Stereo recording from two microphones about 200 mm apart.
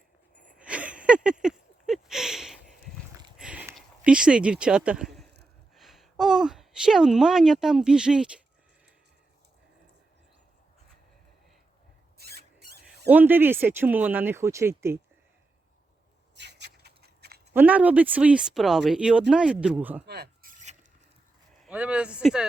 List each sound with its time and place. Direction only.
0.4 s a sound: 5° right (ahead or behind)
5.7 s speech: centre (ahead or behind)
12.1 s rodents: 55° right (ahead or behind)
13.1 s speech: 10° right (ahead or behind)
16.3 s a sound: 60° right (ahead or behind)
17.5 s speech: 10° right (ahead or behind)
20.1 s rub: 55° right (ahead or behind)
21.6 s speech: 5° right (ahead or behind)